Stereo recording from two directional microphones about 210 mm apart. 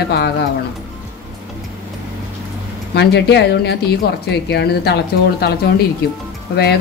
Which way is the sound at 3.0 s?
55° left (ahead or behind).